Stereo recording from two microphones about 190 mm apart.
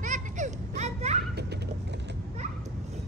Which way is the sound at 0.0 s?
40° right (ahead or behind).